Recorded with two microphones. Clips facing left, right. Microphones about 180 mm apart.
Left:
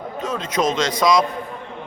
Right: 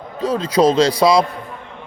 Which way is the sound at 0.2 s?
35° right (ahead or behind).